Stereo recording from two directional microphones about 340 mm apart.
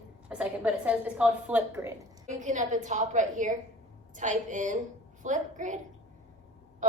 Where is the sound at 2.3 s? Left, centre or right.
Right.